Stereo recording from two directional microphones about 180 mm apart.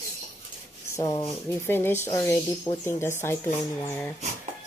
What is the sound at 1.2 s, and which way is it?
Speech, 10° left (ahead or behind).